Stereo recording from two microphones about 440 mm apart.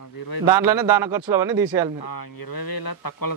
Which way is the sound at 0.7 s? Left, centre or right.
Right.